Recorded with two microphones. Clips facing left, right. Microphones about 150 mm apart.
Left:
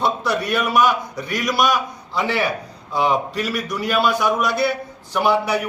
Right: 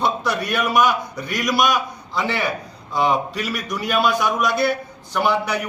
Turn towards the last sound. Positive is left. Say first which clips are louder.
# left 2 dB
turn(degrees=5)  # may be behind; listen again after turning